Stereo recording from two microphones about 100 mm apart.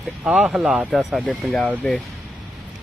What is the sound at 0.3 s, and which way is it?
Speech, 5° right (ahead or behind).